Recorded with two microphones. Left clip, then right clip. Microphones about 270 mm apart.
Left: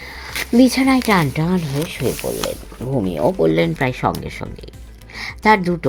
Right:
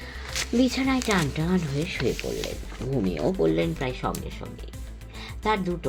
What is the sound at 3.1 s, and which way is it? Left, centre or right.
Speech, centre.